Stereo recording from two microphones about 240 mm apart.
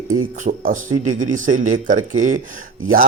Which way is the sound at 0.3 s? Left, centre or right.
Right.